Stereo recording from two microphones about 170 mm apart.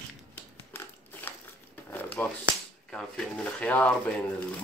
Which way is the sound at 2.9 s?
5° left (ahead or behind).